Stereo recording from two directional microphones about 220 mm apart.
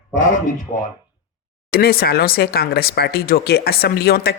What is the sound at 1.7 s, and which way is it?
Speech, 45° left (ahead or behind).